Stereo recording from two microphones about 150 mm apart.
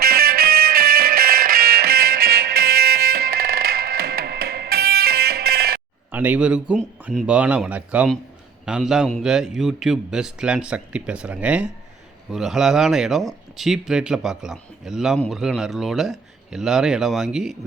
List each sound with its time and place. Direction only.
0.0 s music: 85° right
6.1 s a man's voice: 10° right (ahead or behind)